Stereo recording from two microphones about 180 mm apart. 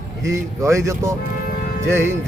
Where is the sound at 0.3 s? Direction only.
15° right (ahead or behind).